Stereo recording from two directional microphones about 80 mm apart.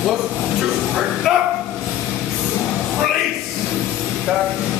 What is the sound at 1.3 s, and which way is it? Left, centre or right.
Bow-wow, centre.